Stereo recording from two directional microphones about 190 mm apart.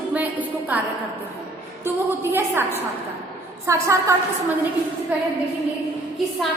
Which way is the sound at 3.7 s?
15° right (ahead or behind).